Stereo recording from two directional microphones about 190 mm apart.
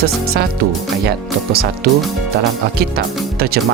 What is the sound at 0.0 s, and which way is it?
Speech, 55° right (ahead or behind).